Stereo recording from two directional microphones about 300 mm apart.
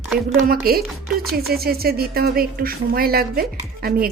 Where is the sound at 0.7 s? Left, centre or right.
Right.